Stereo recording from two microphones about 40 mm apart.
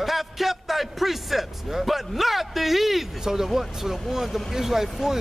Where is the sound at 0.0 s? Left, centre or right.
Centre.